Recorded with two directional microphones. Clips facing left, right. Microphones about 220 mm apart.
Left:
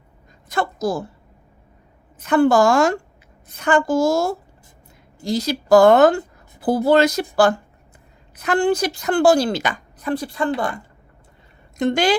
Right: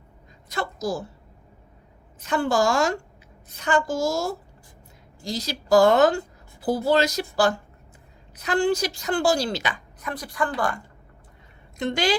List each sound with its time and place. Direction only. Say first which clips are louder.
0.4 s a woman's voice: left 6 dB; 55° left (ahead or behind)
2.1 s a woman's voice: left 8 dB; 55° left (ahead or behind)
8.4 s a woman's voice: left 4 dB; 55° left (ahead or behind)
10.0 s speech: left 6 dB; 30° left (ahead or behind)
11.8 s speech: left 6 dB; 50° left (ahead or behind)